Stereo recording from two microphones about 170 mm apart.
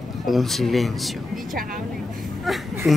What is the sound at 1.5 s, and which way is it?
Speech, 55° right (ahead or behind).